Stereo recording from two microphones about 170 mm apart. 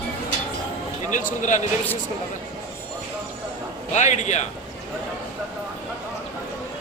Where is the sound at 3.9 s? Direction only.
45° left (ahead or behind).